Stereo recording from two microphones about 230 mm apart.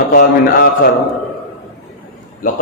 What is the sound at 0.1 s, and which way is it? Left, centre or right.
Speech, left.